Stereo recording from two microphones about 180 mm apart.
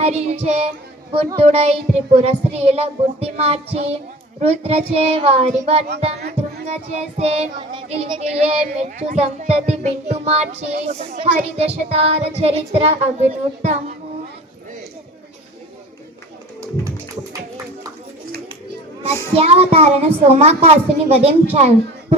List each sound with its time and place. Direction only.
0.0 s speech: 35° right (ahead or behind)
7.2 s speech: 35° right (ahead or behind)
19.3 s speech: 35° right (ahead or behind)